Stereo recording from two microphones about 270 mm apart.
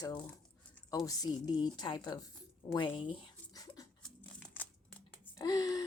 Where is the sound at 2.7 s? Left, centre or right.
Centre.